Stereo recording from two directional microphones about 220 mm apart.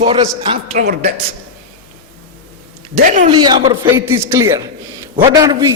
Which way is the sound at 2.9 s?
35° right (ahead or behind).